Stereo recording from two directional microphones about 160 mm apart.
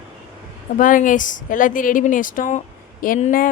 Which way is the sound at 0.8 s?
55° left (ahead or behind).